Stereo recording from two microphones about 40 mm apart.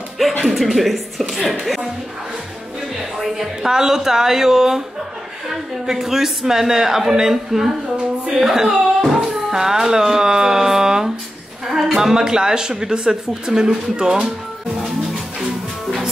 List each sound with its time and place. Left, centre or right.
0.2 s music: centre
0.6 s a woman's voice: centre
3.0 s speech: centre